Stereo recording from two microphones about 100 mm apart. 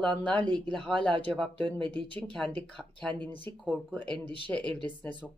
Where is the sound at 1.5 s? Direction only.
55° right (ahead or behind).